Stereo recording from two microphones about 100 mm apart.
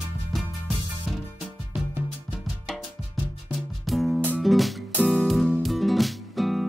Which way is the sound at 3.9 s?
Centre (ahead or behind).